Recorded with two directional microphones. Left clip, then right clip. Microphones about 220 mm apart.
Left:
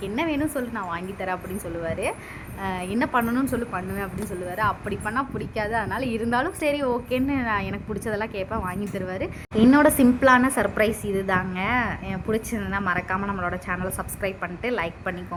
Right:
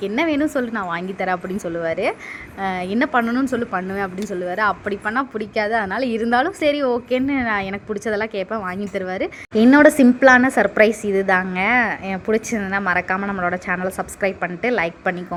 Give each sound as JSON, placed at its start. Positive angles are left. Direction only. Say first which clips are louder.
{"t": 0.0, "sound": "a woman's voice", "louder": "right 6 dB", "side_deg": -25}